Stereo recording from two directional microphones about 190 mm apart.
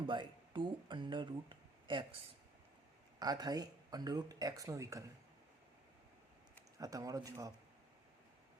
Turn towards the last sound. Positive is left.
turn(degrees=-20)  # may be behind; listen again after turning